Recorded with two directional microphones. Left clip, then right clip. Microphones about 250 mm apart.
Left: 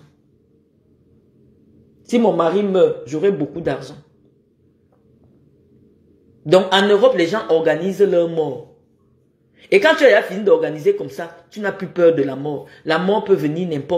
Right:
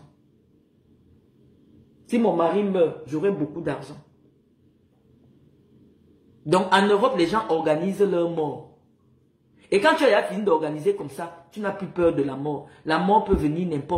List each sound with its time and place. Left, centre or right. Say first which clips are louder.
2.1 s speech: left 5 dB; centre
6.5 s speech: left 6 dB; centre
9.6 s speech: left 6 dB; centre